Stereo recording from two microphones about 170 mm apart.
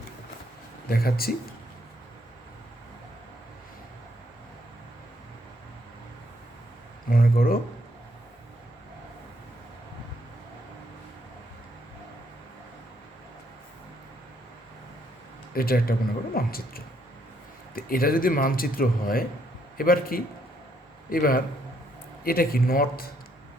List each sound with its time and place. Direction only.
0.9 s speech: 60° left (ahead or behind)
7.1 s speech: 60° left (ahead or behind)
15.5 s speech: 60° left (ahead or behind)